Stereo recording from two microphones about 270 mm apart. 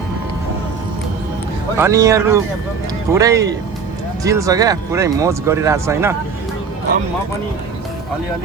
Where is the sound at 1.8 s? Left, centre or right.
Centre.